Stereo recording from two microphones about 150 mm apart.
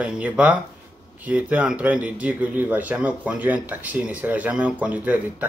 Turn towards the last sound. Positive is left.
turn(degrees=-10)  # may be behind; listen again after turning